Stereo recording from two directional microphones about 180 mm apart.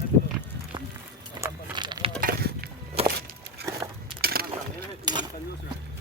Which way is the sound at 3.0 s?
35° right (ahead or behind).